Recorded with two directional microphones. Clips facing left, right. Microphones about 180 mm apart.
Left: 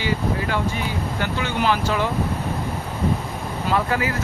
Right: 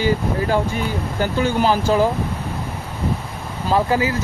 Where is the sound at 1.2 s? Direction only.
40° right (ahead or behind).